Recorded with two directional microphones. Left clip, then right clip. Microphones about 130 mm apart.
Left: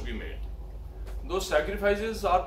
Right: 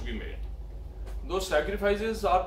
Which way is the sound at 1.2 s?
20° right (ahead or behind).